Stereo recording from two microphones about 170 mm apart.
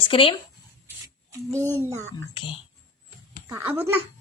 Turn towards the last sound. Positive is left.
turn(degrees=-10)  # may be behind; listen again after turning